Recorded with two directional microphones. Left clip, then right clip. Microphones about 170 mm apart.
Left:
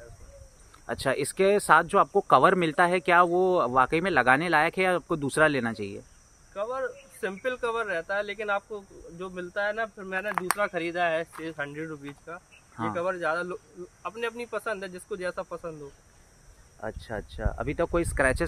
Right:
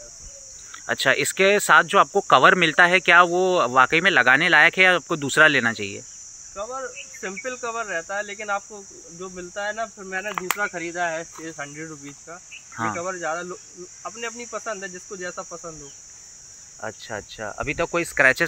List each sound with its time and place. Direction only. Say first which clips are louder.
0.8 s speech: right 8 dB; centre (ahead or behind)
6.5 s cricket: even; 25° left (ahead or behind)
16.8 s speech: right 3 dB; 10° left (ahead or behind)